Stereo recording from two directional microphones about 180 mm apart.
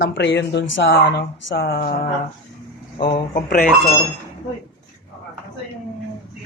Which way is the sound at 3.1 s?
50° left (ahead or behind).